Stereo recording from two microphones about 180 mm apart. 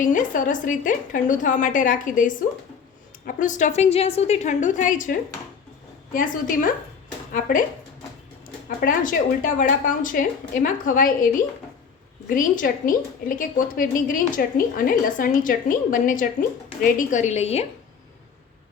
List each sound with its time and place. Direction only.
0.0 s a woman's voice: 45° left (ahead or behind)
6.1 s a woman's voice: 50° left (ahead or behind)
8.8 s a woman's voice: 50° left (ahead or behind)
12.3 s a woman's voice: 50° left (ahead or behind)